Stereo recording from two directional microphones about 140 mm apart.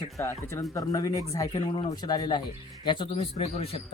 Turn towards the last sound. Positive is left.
turn(degrees=45)  # may be behind; listen again after turning